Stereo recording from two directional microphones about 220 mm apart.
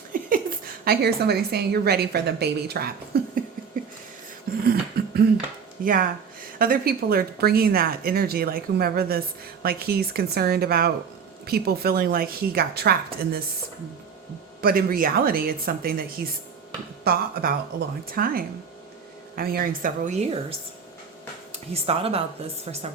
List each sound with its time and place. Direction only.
0.9 s speech: 45° right (ahead or behind)
4.6 s a sound: 45° right (ahead or behind)
5.8 s speech: 40° right (ahead or behind)
14.6 s speech: 40° right (ahead or behind)
21.5 s speech: 25° right (ahead or behind)